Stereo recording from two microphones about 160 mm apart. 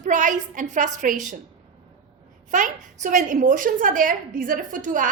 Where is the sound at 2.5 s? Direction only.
55° right (ahead or behind).